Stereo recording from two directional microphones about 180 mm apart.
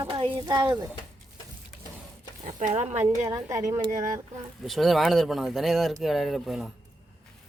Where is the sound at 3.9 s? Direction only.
45° right (ahead or behind).